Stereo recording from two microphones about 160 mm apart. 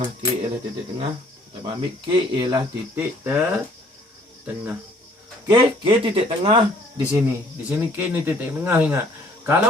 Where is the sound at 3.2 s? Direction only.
10° right (ahead or behind).